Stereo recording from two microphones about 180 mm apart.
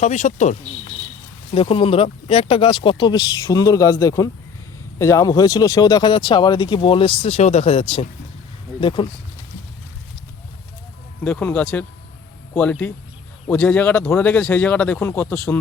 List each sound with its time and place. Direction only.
0.0 s speech: 40° left (ahead or behind)
1.5 s speech: 30° left (ahead or behind)
11.2 s speech: 5° left (ahead or behind)